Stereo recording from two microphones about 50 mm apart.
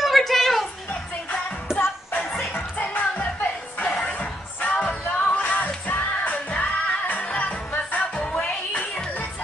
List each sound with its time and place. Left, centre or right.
0.0 s a sound: centre
1.7 s music: centre
2.5 s music: left